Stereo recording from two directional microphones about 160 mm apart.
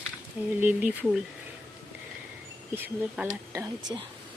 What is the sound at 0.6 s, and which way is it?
Speech, 10° right (ahead or behind).